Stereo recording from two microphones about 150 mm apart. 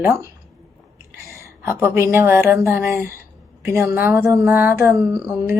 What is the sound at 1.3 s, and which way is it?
Speech, 15° right (ahead or behind).